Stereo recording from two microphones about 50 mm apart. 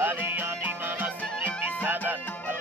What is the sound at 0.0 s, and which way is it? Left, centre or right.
Music, right.